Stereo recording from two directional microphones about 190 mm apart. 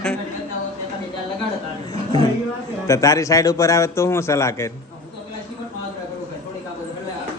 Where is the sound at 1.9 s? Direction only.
20° left (ahead or behind).